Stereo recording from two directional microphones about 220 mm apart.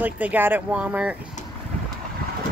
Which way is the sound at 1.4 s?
35° left (ahead or behind).